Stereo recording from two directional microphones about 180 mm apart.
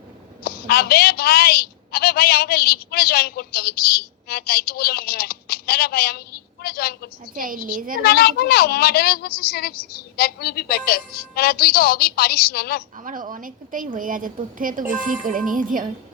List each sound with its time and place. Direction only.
0.4 s a woman's voice: 60° left (ahead or behind)
7.3 s a woman's voice: 50° right (ahead or behind)
8.0 s a woman's voice: 60° left (ahead or behind)
13.0 s a woman's voice: 45° right (ahead or behind)